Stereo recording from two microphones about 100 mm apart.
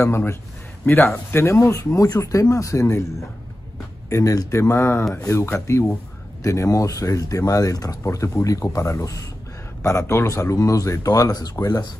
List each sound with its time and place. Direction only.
0.0 s speech: 25° left (ahead or behind)